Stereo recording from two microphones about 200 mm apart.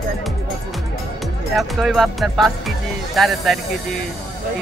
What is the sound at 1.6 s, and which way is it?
A man's voice, centre (ahead or behind).